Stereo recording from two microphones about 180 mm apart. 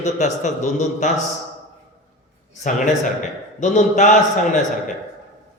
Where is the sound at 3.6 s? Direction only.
40° left (ahead or behind).